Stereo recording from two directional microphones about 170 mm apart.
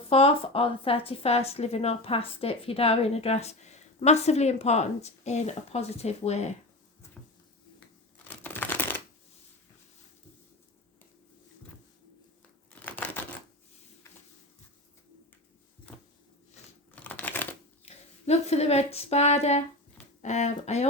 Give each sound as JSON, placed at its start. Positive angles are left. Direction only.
{"t": 0.1, "sound": "a woman's voice", "side_deg": 35}
{"t": 8.4, "sound": "shuffling cards", "side_deg": 10}
{"t": 12.8, "sound": "typewriter", "side_deg": 10}
{"t": 16.9, "sound": "crumpling", "side_deg": 10}
{"t": 17.8, "sound": "a sound", "side_deg": 40}